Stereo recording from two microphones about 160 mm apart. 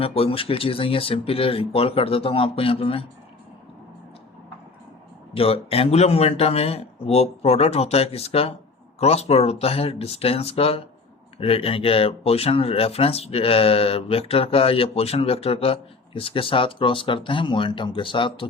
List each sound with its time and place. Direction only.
0.0 s speech: 35° left (ahead or behind)
5.3 s speech: 35° left (ahead or behind)